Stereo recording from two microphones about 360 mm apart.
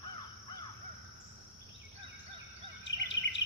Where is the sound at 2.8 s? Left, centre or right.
Left.